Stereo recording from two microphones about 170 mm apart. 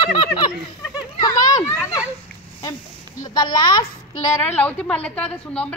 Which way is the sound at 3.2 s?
25° left (ahead or behind).